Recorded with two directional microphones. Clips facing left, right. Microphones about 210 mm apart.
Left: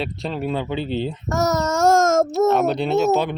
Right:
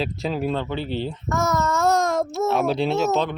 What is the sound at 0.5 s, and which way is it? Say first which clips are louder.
Speech: left 2 dB; 15° left (ahead or behind).